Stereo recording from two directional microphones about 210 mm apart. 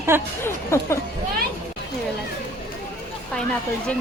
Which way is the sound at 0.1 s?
10° right (ahead or behind).